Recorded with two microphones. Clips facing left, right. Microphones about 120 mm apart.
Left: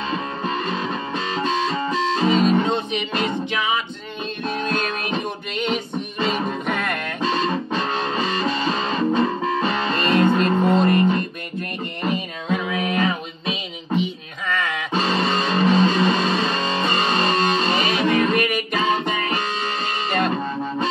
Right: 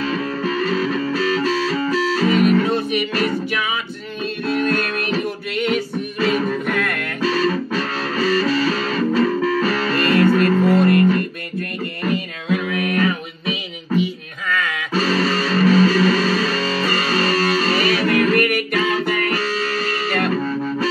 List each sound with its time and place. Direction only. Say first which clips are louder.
0.0 s music: right 4 dB; 25° left (ahead or behind)
14.9 s music: right 3 dB; 25° left (ahead or behind)